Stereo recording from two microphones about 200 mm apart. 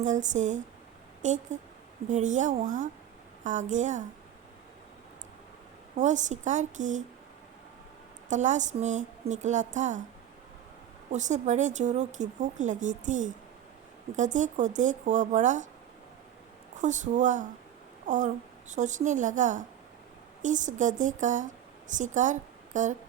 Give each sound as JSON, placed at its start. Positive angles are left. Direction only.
{"t": 0.0, "sound": "speech", "side_deg": -40}
{"t": 6.0, "sound": "speech", "side_deg": -35}
{"t": 8.3, "sound": "speech", "side_deg": -35}
{"t": 11.1, "sound": "speech", "side_deg": -35}
{"t": 16.8, "sound": "a woman's voice", "side_deg": -40}